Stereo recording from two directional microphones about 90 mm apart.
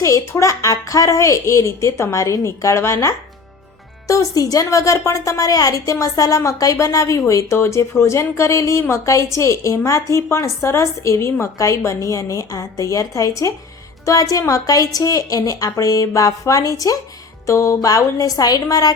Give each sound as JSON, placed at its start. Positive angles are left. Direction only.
{"t": 0.0, "sound": "a woman's voice", "side_deg": 35}
{"t": 17.4, "sound": "music", "side_deg": 35}
{"t": 17.8, "sound": "a woman's voice", "side_deg": 40}